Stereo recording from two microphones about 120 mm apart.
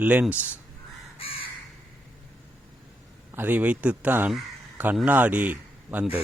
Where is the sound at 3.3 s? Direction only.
15° right (ahead or behind).